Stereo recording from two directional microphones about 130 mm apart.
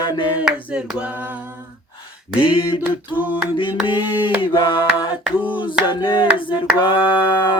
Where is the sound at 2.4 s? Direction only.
40° left (ahead or behind).